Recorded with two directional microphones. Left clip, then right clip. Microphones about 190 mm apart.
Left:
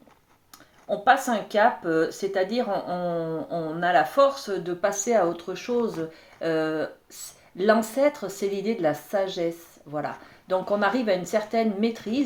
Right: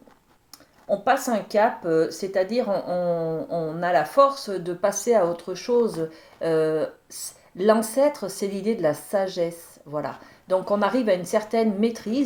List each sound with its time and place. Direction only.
0.9 s speech: 45° right (ahead or behind)